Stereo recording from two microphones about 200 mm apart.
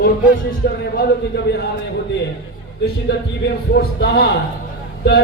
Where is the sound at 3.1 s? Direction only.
55° left (ahead or behind).